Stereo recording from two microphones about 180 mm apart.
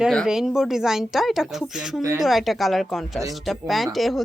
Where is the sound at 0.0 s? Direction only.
Centre (ahead or behind).